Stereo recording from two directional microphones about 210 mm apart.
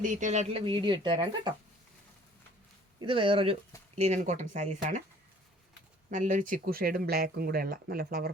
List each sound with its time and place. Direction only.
0.0 s speech: 35° right (ahead or behind); by 1.5 s 20° right (ahead or behind)
3.0 s speech: 25° right (ahead or behind)
6.1 s speech: 35° right (ahead or behind)